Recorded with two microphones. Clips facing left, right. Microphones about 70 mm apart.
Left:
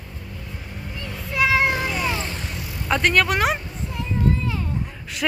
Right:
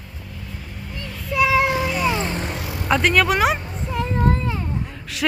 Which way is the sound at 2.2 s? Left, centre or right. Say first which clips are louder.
Right 6 dB; right.